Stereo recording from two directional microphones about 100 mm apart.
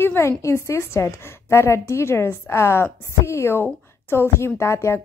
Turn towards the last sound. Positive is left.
turn(degrees=30)  # may be behind; listen again after turning